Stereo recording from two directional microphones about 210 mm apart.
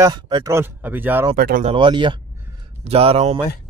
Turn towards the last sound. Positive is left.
turn(degrees=-30)  # may be behind; listen again after turning